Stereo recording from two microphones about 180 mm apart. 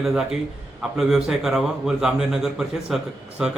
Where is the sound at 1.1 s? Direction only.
5° right (ahead or behind).